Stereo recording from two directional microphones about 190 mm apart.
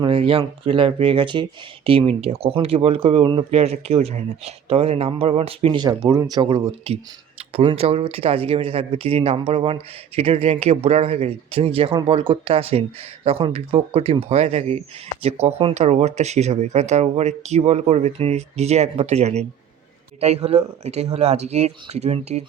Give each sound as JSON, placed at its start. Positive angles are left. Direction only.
{"t": 0.0, "sound": "speech", "side_deg": -30}